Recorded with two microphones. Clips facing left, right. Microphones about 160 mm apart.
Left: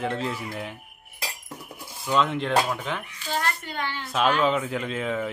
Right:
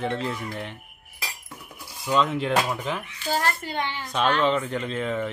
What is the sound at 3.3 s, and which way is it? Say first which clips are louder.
Speech: right 2 dB; 30° right (ahead or behind).